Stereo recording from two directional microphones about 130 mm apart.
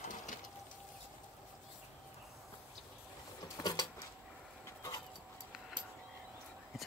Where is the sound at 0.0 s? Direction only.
80° left.